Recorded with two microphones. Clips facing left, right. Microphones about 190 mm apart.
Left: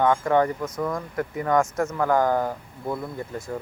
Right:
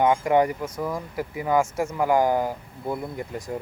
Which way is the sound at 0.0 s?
15° right (ahead or behind).